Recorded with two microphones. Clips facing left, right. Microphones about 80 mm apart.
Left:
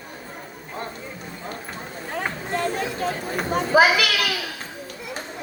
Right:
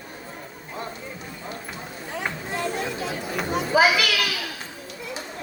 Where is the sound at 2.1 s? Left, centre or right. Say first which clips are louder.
Left 3 dB; left.